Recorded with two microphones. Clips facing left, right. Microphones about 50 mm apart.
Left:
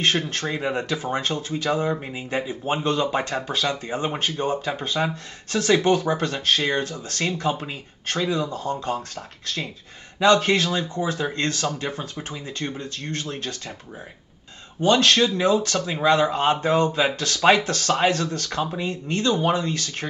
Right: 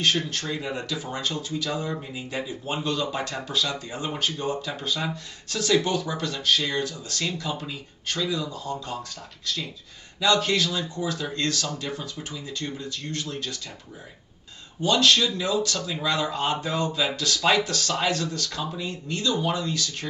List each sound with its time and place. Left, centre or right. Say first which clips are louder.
0.0 s speech: left 2 dB; left
14.8 s speech: left 3 dB; left